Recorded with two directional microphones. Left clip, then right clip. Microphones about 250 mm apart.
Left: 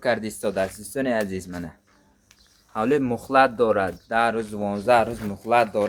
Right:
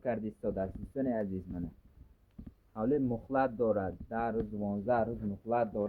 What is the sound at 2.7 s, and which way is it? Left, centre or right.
A man's voice, centre.